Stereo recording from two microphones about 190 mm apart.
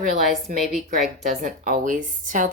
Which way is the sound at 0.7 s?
Centre (ahead or behind).